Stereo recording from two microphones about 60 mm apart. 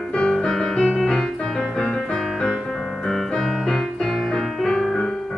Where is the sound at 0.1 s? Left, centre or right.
Centre.